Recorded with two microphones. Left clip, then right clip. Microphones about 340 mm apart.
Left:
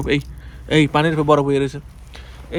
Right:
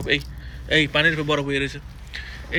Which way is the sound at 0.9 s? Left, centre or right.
Centre.